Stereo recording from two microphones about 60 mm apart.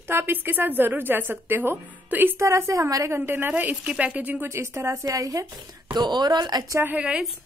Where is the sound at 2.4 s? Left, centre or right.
Right.